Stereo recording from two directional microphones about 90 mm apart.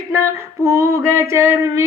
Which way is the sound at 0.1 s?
35° right (ahead or behind).